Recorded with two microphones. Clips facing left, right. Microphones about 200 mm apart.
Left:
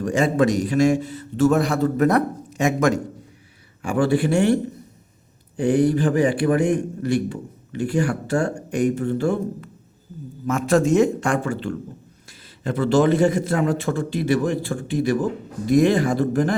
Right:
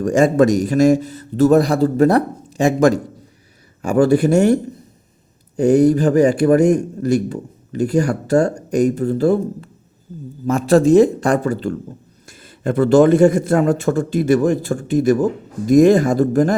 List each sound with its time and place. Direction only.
0.0 s a man's voice: 45° right (ahead or behind)
12.6 s a man's voice: 50° right (ahead or behind)